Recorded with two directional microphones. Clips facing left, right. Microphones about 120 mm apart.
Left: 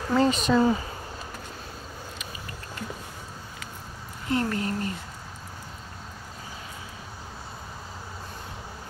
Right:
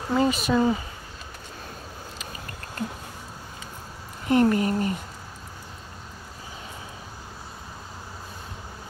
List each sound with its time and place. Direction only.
0.1 s speech: 10° right (ahead or behind)
4.3 s speech: 20° right (ahead or behind)